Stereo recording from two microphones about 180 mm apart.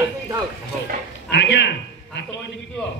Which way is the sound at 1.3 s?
75° left (ahead or behind).